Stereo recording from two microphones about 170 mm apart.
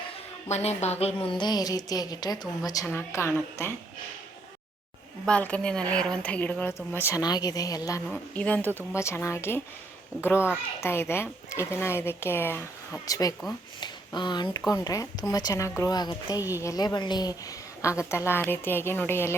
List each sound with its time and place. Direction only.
0.5 s a woman's voice: 40° left (ahead or behind); by 3.7 s 15° left (ahead or behind)
5.2 s a woman's voice: 5° left (ahead or behind)
8.1 s a woman's voice: 10° left (ahead or behind)